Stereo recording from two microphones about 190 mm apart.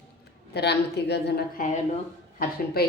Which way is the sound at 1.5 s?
40° left (ahead or behind).